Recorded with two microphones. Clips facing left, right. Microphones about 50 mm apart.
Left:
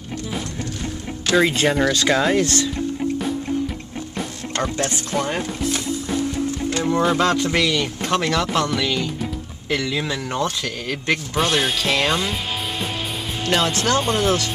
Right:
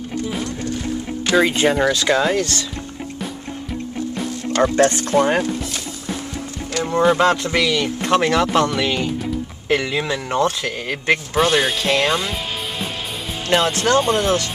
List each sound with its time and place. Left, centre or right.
1.2 s speech: centre
2.3 s speech: centre
4.7 s speech: right
5.1 s speech: right
6.8 s speech: centre
11.3 s speech: centre
13.5 s speech: centre